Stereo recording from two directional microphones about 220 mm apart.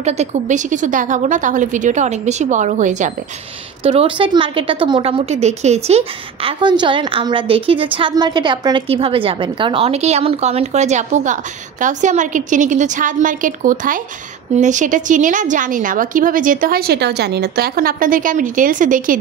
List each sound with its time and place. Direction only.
0.0 s a woman's voice: 30° right (ahead or behind)